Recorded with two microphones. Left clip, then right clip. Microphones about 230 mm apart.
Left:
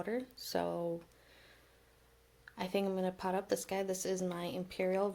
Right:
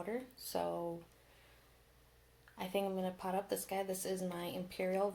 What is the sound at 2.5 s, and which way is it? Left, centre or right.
Speech, left.